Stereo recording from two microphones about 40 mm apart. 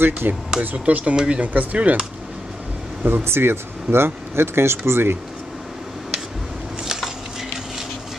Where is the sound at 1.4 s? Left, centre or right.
Right.